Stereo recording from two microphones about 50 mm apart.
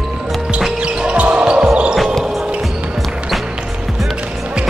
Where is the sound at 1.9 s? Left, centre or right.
Centre.